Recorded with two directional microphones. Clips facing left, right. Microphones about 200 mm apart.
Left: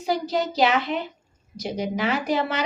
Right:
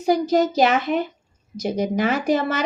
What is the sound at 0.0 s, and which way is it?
Speech, 45° right (ahead or behind).